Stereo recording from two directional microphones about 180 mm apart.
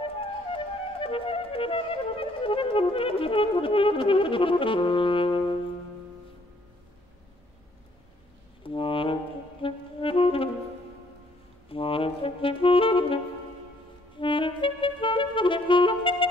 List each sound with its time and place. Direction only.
0.0 s music: 30° left (ahead or behind)
8.6 s brass instrument: 30° left (ahead or behind)
11.7 s saxophone: 30° left (ahead or behind)
14.2 s clarinet: 25° left (ahead or behind)